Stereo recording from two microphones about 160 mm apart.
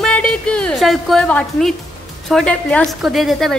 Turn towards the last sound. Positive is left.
turn(degrees=0)  # may be behind; listen again after turning